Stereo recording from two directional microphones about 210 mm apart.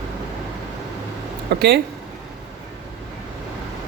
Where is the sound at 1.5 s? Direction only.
50° right (ahead or behind).